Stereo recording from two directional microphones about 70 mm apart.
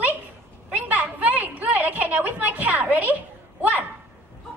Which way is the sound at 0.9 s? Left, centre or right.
Right.